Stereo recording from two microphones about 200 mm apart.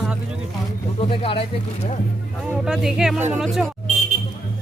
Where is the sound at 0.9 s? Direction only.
25° left (ahead or behind).